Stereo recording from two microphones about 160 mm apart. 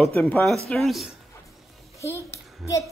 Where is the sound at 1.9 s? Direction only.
15° left (ahead or behind).